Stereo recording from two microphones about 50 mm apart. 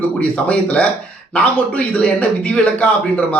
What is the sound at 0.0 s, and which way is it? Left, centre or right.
A man's voice, left.